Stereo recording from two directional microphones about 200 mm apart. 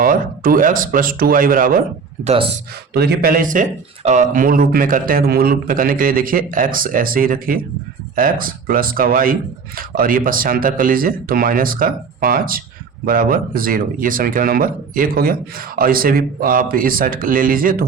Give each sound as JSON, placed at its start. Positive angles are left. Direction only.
{"t": 0.0, "sound": "speech", "side_deg": -45}
{"t": 2.2, "sound": "speech", "side_deg": -30}
{"t": 2.9, "sound": "speech", "side_deg": -55}